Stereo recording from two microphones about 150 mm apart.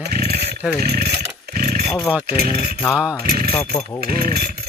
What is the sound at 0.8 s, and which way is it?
Speech, 90° right.